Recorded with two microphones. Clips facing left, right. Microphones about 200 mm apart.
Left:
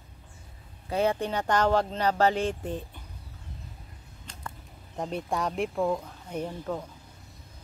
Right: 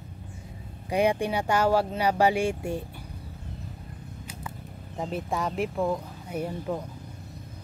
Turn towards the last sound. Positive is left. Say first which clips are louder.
# right 2 dB
turn(degrees=-10)  # may be behind; listen again after turning